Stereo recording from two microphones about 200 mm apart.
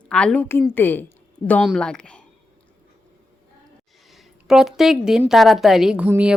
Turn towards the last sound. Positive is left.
turn(degrees=-10)  # may be behind; listen again after turning